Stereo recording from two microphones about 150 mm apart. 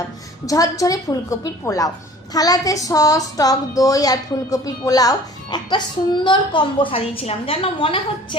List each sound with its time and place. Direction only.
0.4 s a woman's voice: 20° left (ahead or behind)